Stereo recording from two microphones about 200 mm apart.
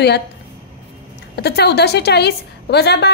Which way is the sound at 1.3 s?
55° left (ahead or behind).